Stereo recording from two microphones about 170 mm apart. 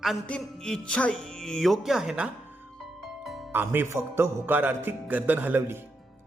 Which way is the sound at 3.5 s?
10° right (ahead or behind).